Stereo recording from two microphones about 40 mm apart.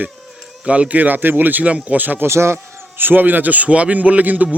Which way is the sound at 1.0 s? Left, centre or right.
Right.